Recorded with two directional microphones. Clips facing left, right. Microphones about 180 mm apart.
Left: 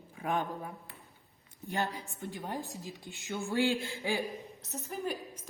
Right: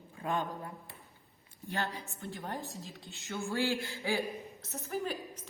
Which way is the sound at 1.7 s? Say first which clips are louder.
Left 2 dB; 15° left (ahead or behind).